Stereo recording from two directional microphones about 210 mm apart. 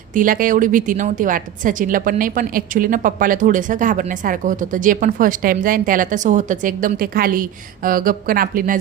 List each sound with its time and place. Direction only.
0.1 s a woman's voice: 40° right (ahead or behind)